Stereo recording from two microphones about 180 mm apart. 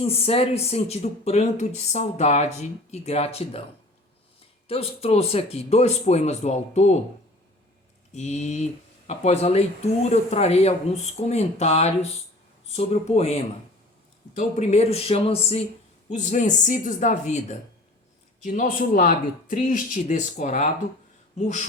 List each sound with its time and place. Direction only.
0.0 s speech: 30° left (ahead or behind)
4.7 s speech: 35° left (ahead or behind)
8.1 s speech: 40° left (ahead or behind)